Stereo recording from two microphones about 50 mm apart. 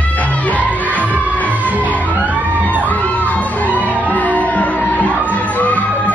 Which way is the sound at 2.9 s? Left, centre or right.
Left.